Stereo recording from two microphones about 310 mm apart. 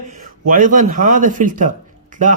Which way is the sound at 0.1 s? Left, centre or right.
Right.